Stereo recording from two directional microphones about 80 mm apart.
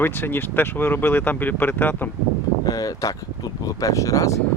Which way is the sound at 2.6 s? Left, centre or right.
Left.